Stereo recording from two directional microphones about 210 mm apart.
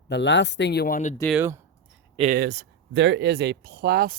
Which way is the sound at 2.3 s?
50° right (ahead or behind).